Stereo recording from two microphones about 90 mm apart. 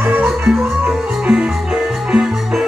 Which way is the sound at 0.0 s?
20° right (ahead or behind).